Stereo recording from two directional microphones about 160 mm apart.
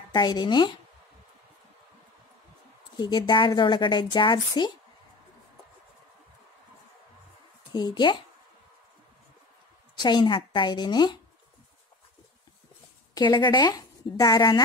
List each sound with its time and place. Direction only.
0.1 s a woman's voice: 25° left (ahead or behind)
3.0 s a woman's voice: 30° left (ahead or behind)
7.7 s a woman's voice: 25° left (ahead or behind)
10.0 s a woman's voice: 30° left (ahead or behind)
13.1 s a woman's voice: 25° left (ahead or behind)